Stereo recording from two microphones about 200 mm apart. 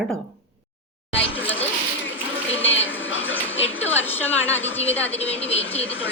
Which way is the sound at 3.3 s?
75° left (ahead or behind).